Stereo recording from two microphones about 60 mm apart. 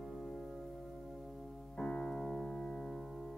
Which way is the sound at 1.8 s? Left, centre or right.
Centre.